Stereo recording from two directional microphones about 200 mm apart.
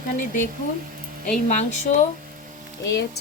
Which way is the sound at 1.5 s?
35° left (ahead or behind).